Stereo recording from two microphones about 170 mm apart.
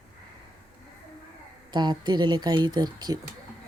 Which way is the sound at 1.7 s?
25° right (ahead or behind).